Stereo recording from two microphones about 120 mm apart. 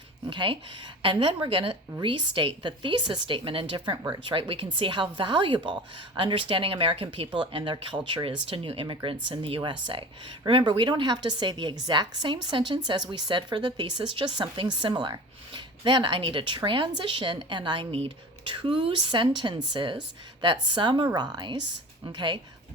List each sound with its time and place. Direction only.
0.3 s a woman's voice: 45° right (ahead or behind)